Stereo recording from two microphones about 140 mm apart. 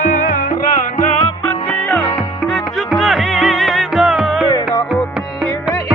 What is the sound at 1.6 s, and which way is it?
Music, 10° left (ahead or behind).